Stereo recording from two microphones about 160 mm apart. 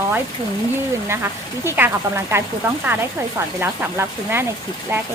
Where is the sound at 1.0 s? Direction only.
15° right (ahead or behind).